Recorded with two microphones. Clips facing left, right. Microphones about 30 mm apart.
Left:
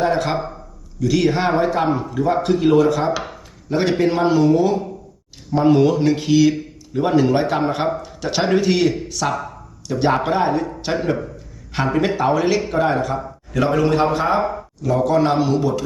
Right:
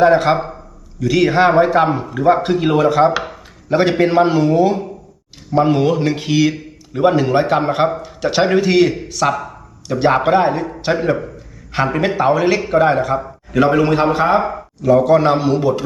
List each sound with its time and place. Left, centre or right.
0.0 s a man's voice: centre
13.1 s a man's voice: right